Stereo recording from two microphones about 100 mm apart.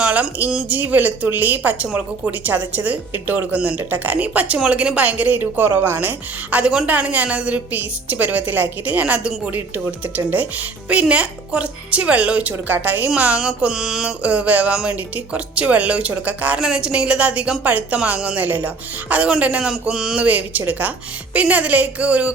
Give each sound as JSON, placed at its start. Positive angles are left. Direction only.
{"t": 0.0, "sound": "a woman's voice", "side_deg": -15}